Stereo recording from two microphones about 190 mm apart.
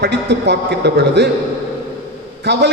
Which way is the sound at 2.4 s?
60° right (ahead or behind).